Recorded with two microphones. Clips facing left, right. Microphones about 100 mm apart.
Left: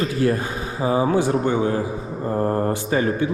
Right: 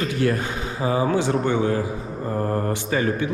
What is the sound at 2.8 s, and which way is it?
Speech, 35° left (ahead or behind).